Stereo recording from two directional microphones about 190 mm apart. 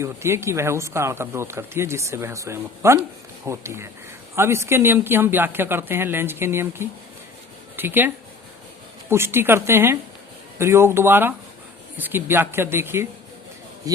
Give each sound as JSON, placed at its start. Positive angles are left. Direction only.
{"t": 0.0, "sound": "speech", "side_deg": -15}